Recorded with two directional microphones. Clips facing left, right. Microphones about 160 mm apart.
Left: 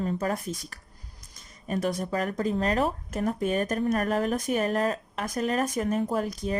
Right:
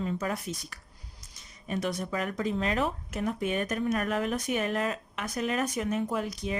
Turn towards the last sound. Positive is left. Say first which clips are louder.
# left 3 dB
turn(degrees=40)  # may be behind; listen again after turning